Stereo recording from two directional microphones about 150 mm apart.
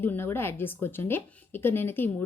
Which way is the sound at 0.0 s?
15° left (ahead or behind).